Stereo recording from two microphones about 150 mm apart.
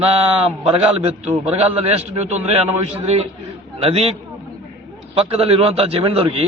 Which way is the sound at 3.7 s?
40° right (ahead or behind).